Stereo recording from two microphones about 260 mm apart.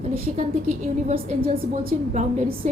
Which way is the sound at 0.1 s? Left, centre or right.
Right.